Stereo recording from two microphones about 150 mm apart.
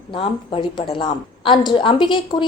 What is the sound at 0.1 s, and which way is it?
A woman's voice, 35° left (ahead or behind).